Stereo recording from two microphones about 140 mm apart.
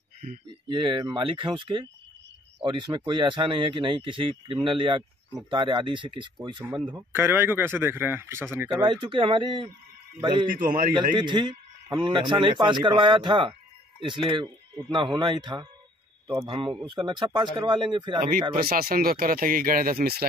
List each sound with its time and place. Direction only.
0.7 s speech: 35° right (ahead or behind)
6.9 s speech: 15° right (ahead or behind)
8.8 s speech: 35° right (ahead or behind)
10.5 s a man's voice: 90° right
11.1 s speech: 35° right (ahead or behind)
18.5 s speech: 90° right